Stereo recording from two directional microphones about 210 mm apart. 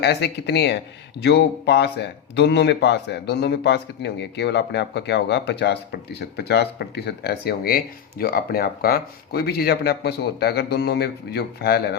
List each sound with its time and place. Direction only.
0.0 s speech: 50° left (ahead or behind)